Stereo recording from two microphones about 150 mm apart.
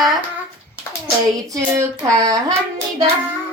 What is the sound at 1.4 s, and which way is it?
Speech, 25° right (ahead or behind).